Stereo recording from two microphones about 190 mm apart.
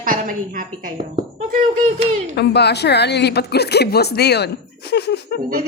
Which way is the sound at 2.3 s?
60° left (ahead or behind).